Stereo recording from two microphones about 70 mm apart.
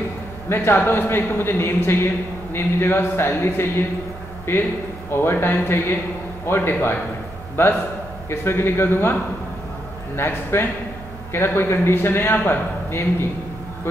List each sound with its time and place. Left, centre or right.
0.5 s a man's voice: left